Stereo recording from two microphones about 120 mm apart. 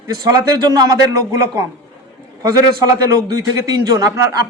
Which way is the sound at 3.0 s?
30° right (ahead or behind).